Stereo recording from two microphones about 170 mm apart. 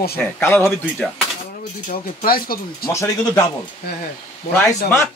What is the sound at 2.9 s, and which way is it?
Speech, 15° left (ahead or behind).